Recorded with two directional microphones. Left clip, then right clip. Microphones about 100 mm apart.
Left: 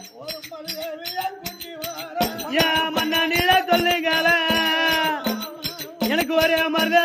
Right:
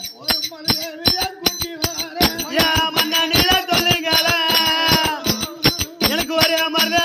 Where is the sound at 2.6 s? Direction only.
40° left (ahead or behind).